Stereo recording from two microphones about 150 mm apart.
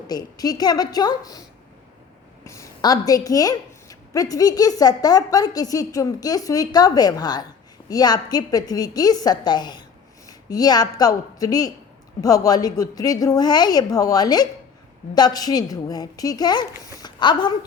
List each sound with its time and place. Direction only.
0.1 s a woman's voice: 25° left (ahead or behind)